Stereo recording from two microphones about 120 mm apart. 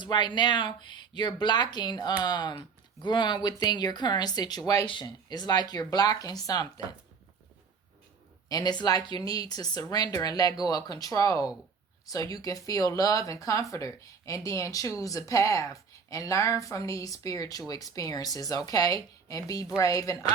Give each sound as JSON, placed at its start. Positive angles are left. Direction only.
{"t": 0.0, "sound": "speech", "side_deg": 40}
{"t": 8.4, "sound": "speech", "side_deg": 35}